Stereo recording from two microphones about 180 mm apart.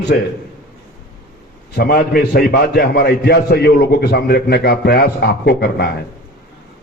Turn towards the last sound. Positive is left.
turn(degrees=60)  # may be behind; listen again after turning